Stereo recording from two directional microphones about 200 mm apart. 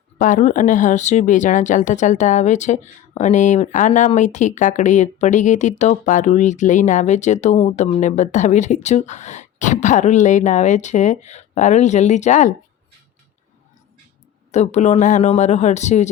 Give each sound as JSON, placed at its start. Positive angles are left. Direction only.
{"t": 0.2, "sound": "speech", "side_deg": 40}
{"t": 14.5, "sound": "speech", "side_deg": 35}